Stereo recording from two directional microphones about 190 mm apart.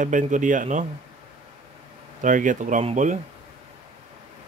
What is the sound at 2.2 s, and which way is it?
Speech, 45° right (ahead or behind).